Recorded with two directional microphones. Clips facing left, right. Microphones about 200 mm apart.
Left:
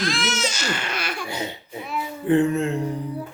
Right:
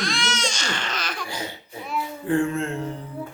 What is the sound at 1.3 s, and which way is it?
Speech, 25° left (ahead or behind).